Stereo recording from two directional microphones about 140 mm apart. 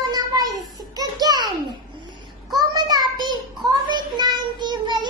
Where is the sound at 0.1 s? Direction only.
25° right (ahead or behind).